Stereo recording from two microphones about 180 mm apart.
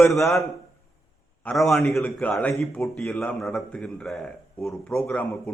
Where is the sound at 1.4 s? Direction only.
Centre (ahead or behind).